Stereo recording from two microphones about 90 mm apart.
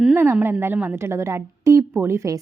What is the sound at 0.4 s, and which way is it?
A woman's voice, 25° right (ahead or behind).